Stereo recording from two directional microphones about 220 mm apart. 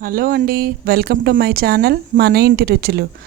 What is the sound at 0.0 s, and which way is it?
A woman's voice, 40° right (ahead or behind).